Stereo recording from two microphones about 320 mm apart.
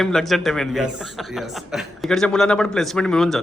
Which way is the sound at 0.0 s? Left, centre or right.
Centre.